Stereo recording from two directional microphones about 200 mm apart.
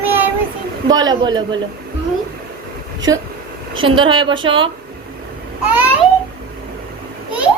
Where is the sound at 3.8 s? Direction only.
25° right (ahead or behind).